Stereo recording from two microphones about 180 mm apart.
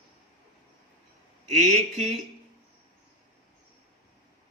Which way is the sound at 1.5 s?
40° right (ahead or behind).